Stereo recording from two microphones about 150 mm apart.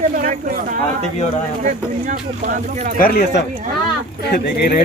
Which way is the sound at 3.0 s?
85° left.